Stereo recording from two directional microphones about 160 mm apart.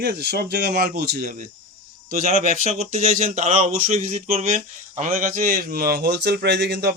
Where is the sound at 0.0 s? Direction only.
90° right; by 1.3 s 75° right (ahead or behind).